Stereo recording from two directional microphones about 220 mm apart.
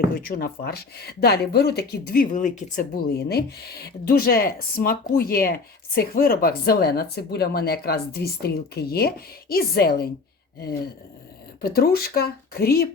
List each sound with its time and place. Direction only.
0.1 s speech: 40° left (ahead or behind)
11.6 s speech: 45° left (ahead or behind)